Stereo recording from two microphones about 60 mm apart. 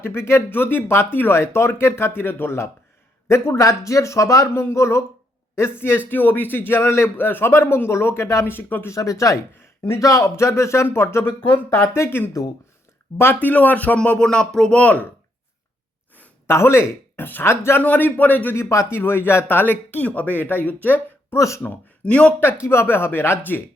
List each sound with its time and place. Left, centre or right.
0.0 s speech: left
3.6 s speech: left
4.4 s speech: left
8.4 s speech: left
8.9 s speech: left
13.4 s speech: left
16.5 s speech: left
17.8 s speech: left
18.5 s speech: left
18.9 s speech: left
20.8 s a sound: left
21.3 s speech: left
22.0 s speech: centre
22.6 s speech: left